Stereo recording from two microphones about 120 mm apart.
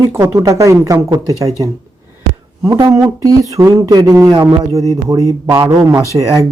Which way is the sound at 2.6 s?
30° right (ahead or behind).